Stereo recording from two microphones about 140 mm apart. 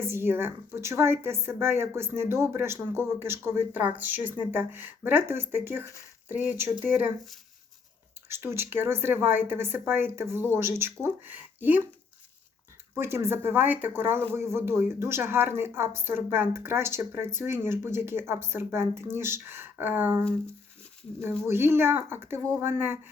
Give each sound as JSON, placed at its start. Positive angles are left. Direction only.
{"t": 0.0, "sound": "speech", "side_deg": -15}
{"t": 8.3, "sound": "speech", "side_deg": -15}
{"t": 12.9, "sound": "speech", "side_deg": -15}